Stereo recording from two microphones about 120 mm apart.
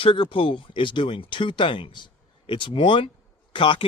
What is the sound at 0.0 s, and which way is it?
Speech, 45° left (ahead or behind).